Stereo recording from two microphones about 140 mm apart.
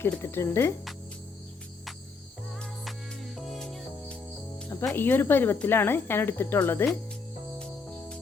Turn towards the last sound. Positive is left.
turn(degrees=15)  # may be behind; listen again after turning